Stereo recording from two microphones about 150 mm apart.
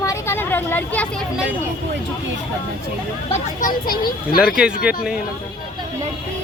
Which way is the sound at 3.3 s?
65° left (ahead or behind).